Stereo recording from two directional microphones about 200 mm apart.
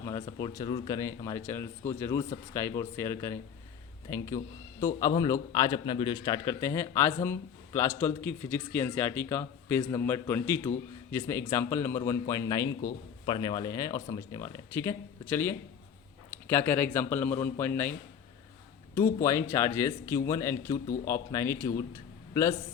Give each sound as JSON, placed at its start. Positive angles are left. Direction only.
{"t": 0.0, "sound": "a man's voice", "side_deg": 15}
{"t": 18.9, "sound": "a man's voice", "side_deg": 15}
{"t": 20.8, "sound": "speech", "side_deg": 45}
{"t": 21.1, "sound": "a man's voice", "side_deg": 15}